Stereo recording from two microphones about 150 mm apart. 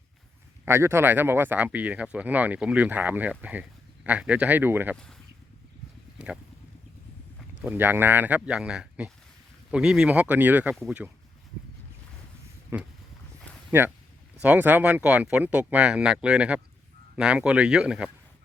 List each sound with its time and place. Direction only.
0.6 s speech: 15° right (ahead or behind)
4.9 s speech: 5° left (ahead or behind)
6.1 s speech: 5° right (ahead or behind)
7.6 s speech: 15° right (ahead or behind)
12.7 s speech: 15° right (ahead or behind)